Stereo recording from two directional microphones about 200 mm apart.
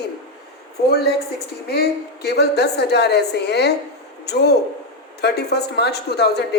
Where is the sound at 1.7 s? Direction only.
55° left (ahead or behind).